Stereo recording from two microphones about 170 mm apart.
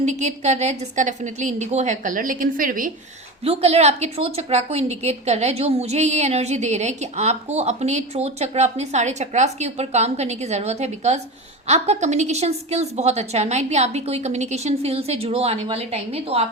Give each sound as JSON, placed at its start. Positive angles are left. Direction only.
{"t": 0.0, "sound": "a woman's voice", "side_deg": -45}
{"t": 3.4, "sound": "a woman's voice", "side_deg": -35}